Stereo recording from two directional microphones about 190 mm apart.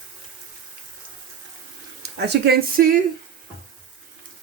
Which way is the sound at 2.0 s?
60° right (ahead or behind).